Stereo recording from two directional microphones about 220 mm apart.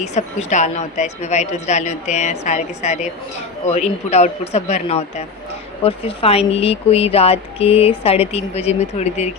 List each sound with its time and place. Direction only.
0.0 s a woman's voice: 30° left (ahead or behind)